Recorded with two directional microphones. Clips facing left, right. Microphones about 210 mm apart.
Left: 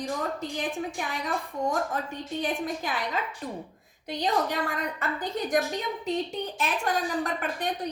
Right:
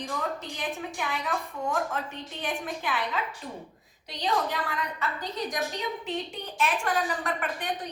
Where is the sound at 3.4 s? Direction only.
45° left (ahead or behind).